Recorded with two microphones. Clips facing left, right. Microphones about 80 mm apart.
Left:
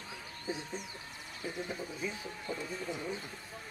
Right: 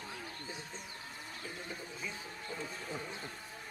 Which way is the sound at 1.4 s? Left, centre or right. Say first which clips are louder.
Left 8 dB; centre.